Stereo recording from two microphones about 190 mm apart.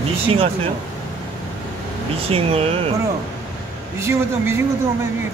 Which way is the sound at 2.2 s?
30° right (ahead or behind).